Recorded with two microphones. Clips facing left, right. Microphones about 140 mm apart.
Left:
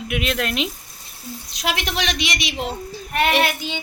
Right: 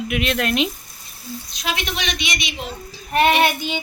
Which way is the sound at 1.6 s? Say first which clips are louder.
Left 2 dB; 70° left (ahead or behind).